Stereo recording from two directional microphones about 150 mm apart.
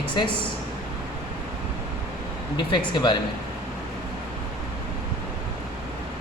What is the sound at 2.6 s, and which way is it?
Speech, 30° left (ahead or behind).